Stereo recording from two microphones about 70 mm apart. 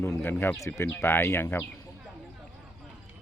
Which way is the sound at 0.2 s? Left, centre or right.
Left.